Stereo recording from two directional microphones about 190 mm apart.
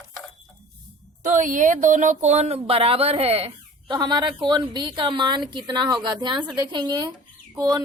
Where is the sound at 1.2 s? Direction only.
40° right (ahead or behind).